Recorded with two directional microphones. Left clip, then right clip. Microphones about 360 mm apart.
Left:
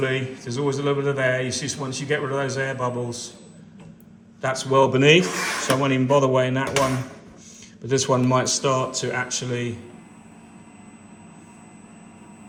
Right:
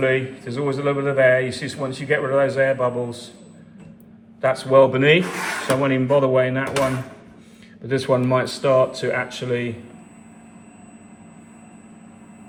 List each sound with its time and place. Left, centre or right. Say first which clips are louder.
0.0 s speech: right 5 dB; centre
4.4 s speech: right 4 dB; centre